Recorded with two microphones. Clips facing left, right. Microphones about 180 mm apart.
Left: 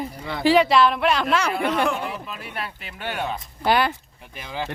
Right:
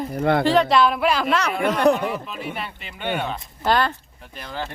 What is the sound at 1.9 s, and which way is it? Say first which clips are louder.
Speech: right 8 dB; 40° right (ahead or behind).